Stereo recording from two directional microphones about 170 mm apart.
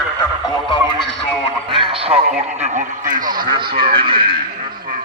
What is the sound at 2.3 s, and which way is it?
Radio, 45° right (ahead or behind).